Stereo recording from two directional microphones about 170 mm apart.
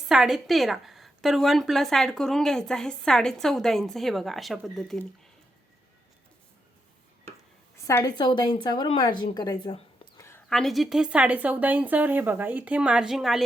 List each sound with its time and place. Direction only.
0.1 s a woman's voice: centre (ahead or behind)
7.9 s a woman's voice: 20° left (ahead or behind)
10.2 s a sound: 15° left (ahead or behind)
10.5 s a woman's voice: centre (ahead or behind)